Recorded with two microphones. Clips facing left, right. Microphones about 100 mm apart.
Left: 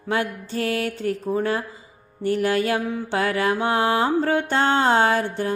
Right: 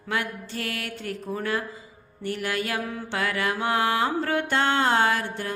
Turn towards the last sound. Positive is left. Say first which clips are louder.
# left 5 dB
turn(degrees=30)  # may be behind; listen again after turning